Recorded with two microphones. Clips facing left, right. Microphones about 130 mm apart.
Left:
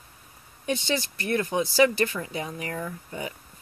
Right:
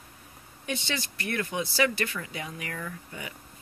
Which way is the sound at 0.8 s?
35° left (ahead or behind).